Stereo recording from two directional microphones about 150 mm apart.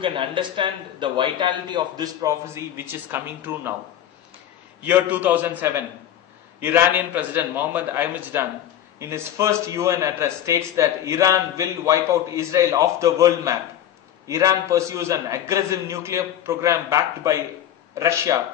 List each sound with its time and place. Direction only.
0.0 s a man's voice: 35° right (ahead or behind); by 3.7 s 15° right (ahead or behind)
4.8 s a man's voice: 10° right (ahead or behind)